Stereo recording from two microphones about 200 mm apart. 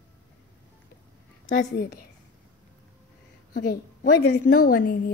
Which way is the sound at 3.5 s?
45° left (ahead or behind).